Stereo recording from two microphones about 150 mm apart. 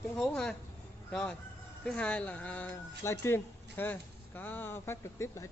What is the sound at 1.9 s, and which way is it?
Speech, 10° left (ahead or behind).